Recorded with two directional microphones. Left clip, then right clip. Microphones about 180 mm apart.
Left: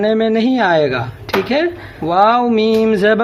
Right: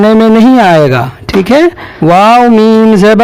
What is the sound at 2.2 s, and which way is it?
Speech, 35° right (ahead or behind).